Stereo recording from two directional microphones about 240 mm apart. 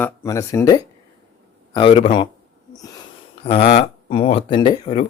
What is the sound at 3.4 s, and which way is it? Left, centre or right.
Speech, left.